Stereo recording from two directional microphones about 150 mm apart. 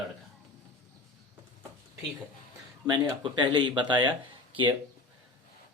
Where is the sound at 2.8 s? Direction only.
30° right (ahead or behind).